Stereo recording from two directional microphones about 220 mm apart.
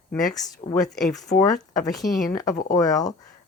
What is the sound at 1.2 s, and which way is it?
Speech, 15° left (ahead or behind).